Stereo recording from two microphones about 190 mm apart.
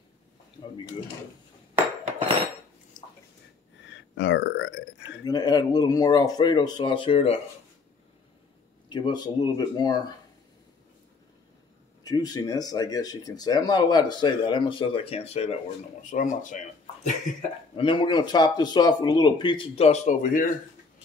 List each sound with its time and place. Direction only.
3.8 s burping: 70° left (ahead or behind)
5.2 s speech: 20° left (ahead or behind)
8.8 s speech: 25° left (ahead or behind)
12.0 s speech: 20° left (ahead or behind); by 17.1 s 40° left (ahead or behind)
17.7 s speech: 25° left (ahead or behind); by 20.4 s 40° left (ahead or behind)